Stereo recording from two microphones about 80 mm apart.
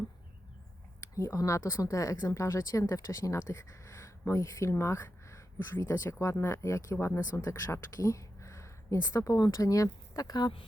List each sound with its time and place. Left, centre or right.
1.1 s speech: left
7.3 s speech: left
7.7 s a sound: left
9.0 s speech: left